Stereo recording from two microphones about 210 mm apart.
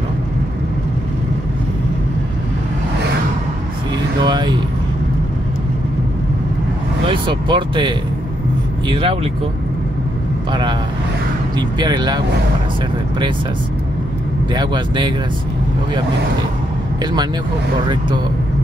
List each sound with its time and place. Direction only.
4.2 s vehicle: 20° right (ahead or behind)
7.1 s vehicle: 25° right (ahead or behind)
8.8 s speech: 25° right (ahead or behind)
10.5 s speech: 20° right (ahead or behind)
14.5 s speech: 20° right (ahead or behind)
17.0 s speech: 20° right (ahead or behind)